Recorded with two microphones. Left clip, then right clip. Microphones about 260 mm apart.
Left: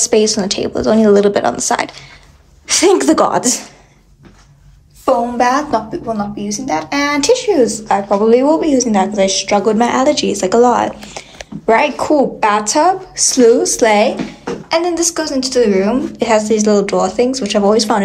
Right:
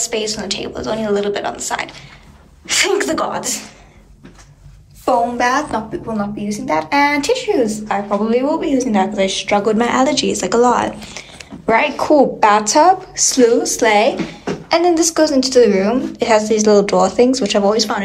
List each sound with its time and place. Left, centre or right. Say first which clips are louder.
0.0 s speech: left 8 dB; left
5.0 s speech: left 2 dB; left
6.1 s a woman's voice: left 2 dB; centre